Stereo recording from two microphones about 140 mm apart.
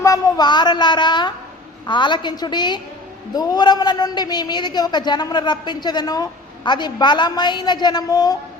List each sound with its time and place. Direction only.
0.0 s a man's voice: 25° left (ahead or behind)